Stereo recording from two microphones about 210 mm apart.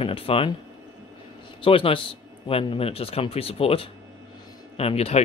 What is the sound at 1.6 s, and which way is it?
Speech, 25° left (ahead or behind).